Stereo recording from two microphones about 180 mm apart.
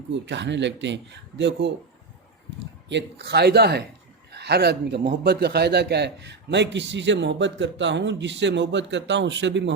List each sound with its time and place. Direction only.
0.1 s a man's voice: 80° right
2.9 s a man's voice: 65° right (ahead or behind)